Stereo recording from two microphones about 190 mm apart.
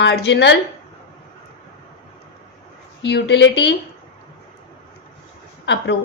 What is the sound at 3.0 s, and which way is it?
Speech, 65° left (ahead or behind).